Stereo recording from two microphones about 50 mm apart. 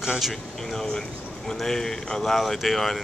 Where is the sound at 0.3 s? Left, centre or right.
Centre.